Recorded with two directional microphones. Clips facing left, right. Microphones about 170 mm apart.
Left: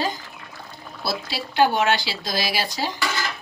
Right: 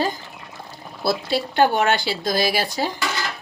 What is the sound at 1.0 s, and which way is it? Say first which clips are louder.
Speech: right 7 dB; 50° right (ahead or behind).